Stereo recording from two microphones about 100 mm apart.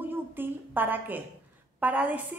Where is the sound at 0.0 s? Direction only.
20° right (ahead or behind).